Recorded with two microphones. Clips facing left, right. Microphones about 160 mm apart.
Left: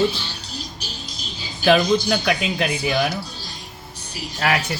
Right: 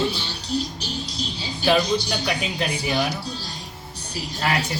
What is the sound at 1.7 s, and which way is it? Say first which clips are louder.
Speech: left 4 dB; 65° left (ahead or behind).